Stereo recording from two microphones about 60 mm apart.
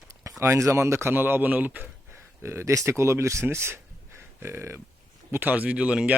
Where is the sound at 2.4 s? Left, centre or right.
Right.